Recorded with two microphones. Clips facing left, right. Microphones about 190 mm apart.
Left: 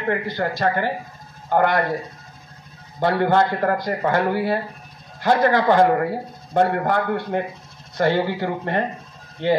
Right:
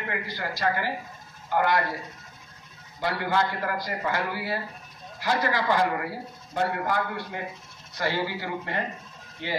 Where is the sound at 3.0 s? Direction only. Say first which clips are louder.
Left 8 dB; 55° left (ahead or behind).